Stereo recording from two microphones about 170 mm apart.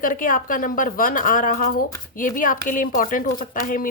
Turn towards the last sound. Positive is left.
turn(degrees=55)  # may be behind; listen again after turning